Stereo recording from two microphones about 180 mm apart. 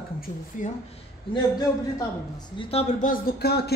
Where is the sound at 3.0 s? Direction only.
55° left (ahead or behind).